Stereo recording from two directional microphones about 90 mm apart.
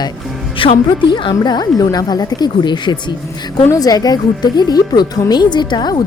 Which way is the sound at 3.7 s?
45° left (ahead or behind).